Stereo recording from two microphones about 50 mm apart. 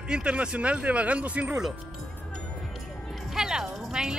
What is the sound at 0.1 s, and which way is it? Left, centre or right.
Speech, right.